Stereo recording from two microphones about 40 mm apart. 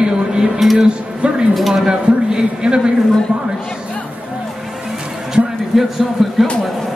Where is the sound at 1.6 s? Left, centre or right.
Centre.